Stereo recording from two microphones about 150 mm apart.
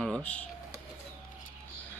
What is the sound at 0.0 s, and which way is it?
Computer keyboard, 5° left (ahead or behind).